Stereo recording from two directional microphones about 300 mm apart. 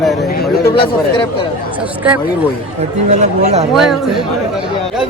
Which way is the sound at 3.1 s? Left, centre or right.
Right.